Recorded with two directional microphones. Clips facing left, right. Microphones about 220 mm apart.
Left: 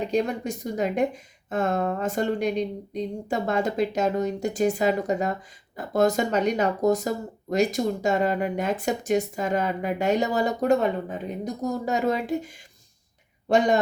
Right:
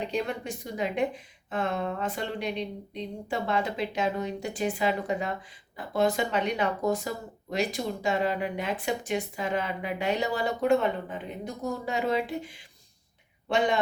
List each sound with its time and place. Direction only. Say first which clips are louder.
0.1 s speech: left 6 dB; 40° left (ahead or behind)
13.5 s a man's voice: left 6 dB; 40° left (ahead or behind)